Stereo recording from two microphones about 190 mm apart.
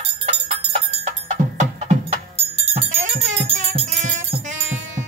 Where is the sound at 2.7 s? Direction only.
35° right (ahead or behind).